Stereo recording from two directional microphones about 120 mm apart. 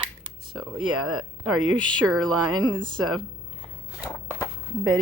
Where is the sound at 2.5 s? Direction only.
40° right (ahead or behind).